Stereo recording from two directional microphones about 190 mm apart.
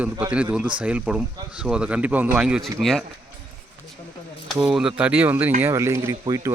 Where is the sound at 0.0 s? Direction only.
5° right (ahead or behind).